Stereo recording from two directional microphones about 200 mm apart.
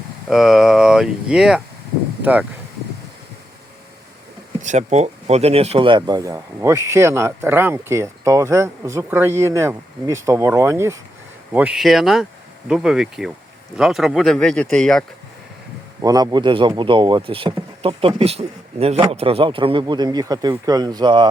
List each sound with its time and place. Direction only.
0.3 s speech: centre (ahead or behind)
4.6 s speech: 35° right (ahead or behind); by 15.0 s 5° left (ahead or behind)
16.0 s speech: 20° right (ahead or behind)